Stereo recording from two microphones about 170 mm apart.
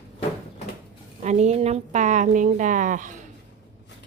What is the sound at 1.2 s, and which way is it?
A woman's voice, 40° right (ahead or behind).